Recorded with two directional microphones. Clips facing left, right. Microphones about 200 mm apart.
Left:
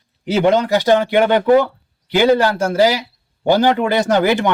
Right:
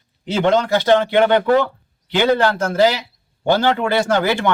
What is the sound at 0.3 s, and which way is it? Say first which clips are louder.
Speech: left 2 dB; 10° left (ahead or behind).